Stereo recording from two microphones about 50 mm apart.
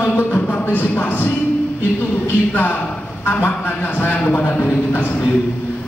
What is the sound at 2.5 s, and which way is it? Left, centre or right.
Speech, left.